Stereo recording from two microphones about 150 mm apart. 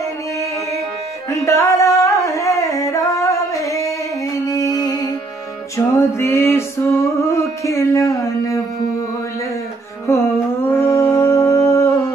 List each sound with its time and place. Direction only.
1.3 s a sound: 20° left (ahead or behind)
2.2 s singing: 20° left (ahead or behind)
4.5 s music: 25° left (ahead or behind)
10.0 s music: 15° left (ahead or behind)